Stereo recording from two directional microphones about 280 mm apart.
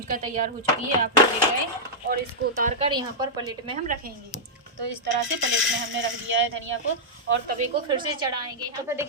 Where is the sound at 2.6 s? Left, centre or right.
Right.